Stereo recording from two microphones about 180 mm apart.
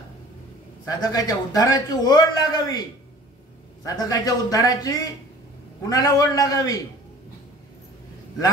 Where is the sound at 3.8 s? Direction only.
20° left (ahead or behind).